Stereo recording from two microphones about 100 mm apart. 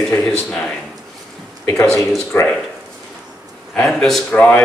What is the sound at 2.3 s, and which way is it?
Speech, 20° left (ahead or behind).